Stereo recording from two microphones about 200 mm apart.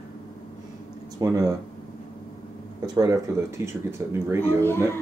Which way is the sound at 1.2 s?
20° right (ahead or behind).